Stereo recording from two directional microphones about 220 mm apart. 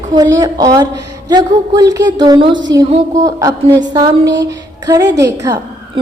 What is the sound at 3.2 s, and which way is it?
Speech, 15° right (ahead or behind).